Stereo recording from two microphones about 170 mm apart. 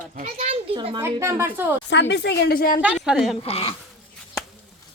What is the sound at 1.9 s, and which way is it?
Speech, 90° left.